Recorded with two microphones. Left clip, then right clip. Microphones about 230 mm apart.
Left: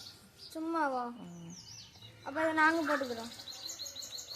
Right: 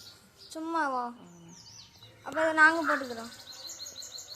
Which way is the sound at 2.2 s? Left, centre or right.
Centre.